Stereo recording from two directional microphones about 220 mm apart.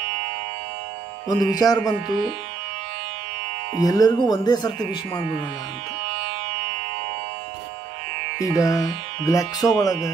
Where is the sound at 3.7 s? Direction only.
15° left (ahead or behind).